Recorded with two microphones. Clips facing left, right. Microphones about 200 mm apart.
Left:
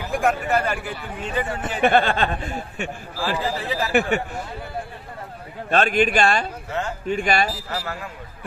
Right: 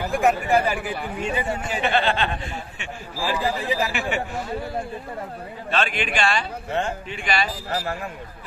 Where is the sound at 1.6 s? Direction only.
50° left (ahead or behind).